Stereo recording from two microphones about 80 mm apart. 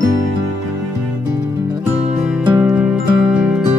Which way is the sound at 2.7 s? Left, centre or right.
Centre.